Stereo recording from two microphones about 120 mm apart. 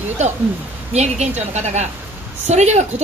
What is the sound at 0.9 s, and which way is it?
A woman's voice, 70° right (ahead or behind).